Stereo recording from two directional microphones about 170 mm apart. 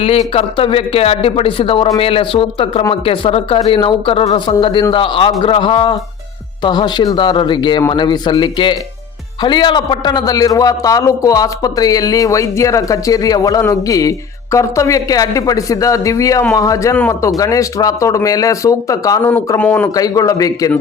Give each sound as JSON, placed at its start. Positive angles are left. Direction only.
{"t": 0.0, "sound": "a man's voice", "side_deg": 35}
{"t": 19.3, "sound": "speech", "side_deg": 10}
{"t": 20.0, "sound": "a man's voice", "side_deg": 20}